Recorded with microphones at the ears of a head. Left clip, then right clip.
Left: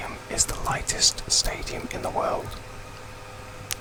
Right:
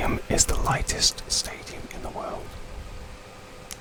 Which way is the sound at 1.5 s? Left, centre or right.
Left.